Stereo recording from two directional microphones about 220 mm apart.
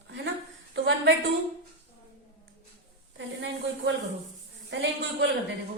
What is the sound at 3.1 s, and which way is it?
Speech, 55° right (ahead or behind).